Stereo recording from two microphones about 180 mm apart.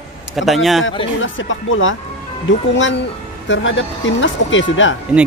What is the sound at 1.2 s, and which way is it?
Speech, 90° left.